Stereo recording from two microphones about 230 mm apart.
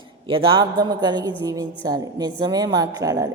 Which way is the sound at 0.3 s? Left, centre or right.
Right.